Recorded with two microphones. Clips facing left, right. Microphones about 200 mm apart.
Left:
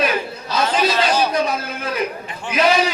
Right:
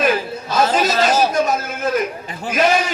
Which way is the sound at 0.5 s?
45° right (ahead or behind).